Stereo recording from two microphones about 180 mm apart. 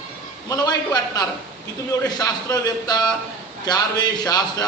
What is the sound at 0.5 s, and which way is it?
A man's voice, 20° left (ahead or behind).